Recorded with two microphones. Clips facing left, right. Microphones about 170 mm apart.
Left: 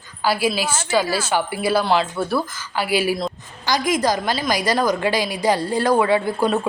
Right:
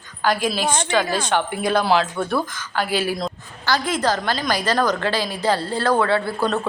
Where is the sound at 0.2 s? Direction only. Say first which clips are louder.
Left 1 dB; 10° left (ahead or behind).